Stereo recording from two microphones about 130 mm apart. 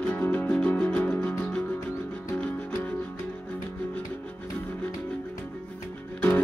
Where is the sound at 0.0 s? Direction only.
10° left (ahead or behind).